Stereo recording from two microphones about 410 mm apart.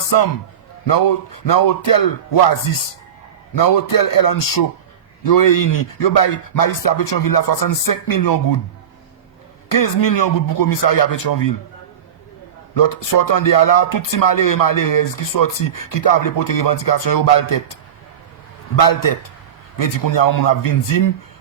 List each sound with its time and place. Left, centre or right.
0.9 s speech: left
9.6 s speech: left
12.7 s speech: left
18.8 s speech: left